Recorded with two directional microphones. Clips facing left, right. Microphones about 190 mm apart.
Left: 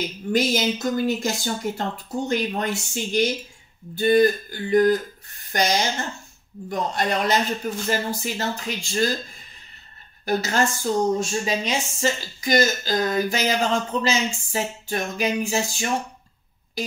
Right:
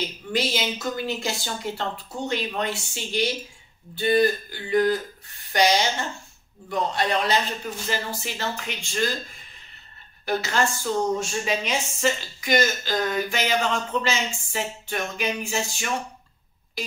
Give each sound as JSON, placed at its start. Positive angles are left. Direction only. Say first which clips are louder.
{"t": 0.3, "sound": "a woman's voice", "louder": "left 5 dB", "side_deg": 45}
{"t": 10.2, "sound": "a woman's voice", "louder": "left 2 dB", "side_deg": 40}